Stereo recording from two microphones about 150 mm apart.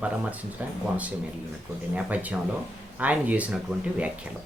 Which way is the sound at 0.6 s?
10° right (ahead or behind).